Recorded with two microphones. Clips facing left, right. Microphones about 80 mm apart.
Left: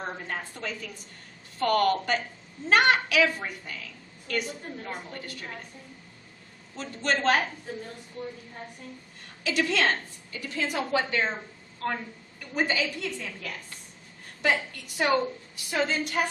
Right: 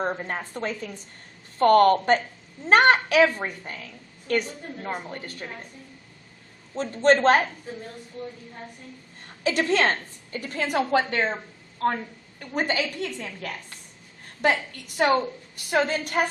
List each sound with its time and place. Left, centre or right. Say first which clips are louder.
0.0 s a woman's voice: right 6 dB; right
6.7 s a woman's voice: right 9 dB; right
9.2 s a woman's voice: right 3 dB; right
12.4 s a woman's voice: right 2 dB; right